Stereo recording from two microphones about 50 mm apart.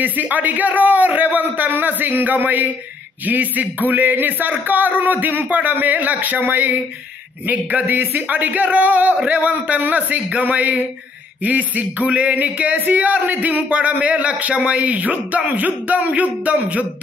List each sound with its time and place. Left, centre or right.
0.0 s a man's voice: right